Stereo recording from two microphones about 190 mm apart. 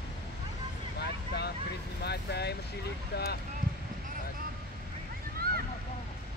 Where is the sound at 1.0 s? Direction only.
60° left (ahead or behind).